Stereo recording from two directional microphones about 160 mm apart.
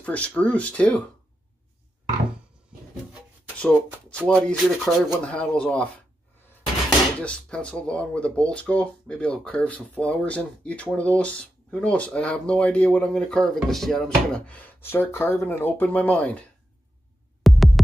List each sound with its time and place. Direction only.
0.0 s speech: 10° left (ahead or behind)
3.5 s speech: 5° left (ahead or behind)
7.2 s speech: 5° left (ahead or behind)
17.4 s music: centre (ahead or behind)